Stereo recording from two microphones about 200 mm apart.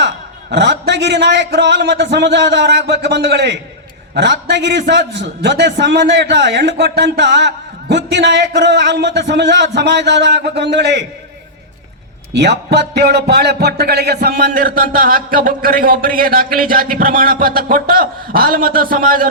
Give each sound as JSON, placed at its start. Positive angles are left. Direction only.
{"t": 0.5, "sound": "a man's voice", "side_deg": -60}
{"t": 12.3, "sound": "speech", "side_deg": -60}